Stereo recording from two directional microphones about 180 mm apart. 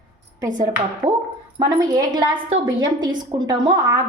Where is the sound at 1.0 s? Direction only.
25° right (ahead or behind).